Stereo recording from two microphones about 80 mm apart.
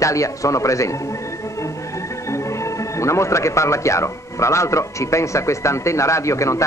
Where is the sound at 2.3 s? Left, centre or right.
Left.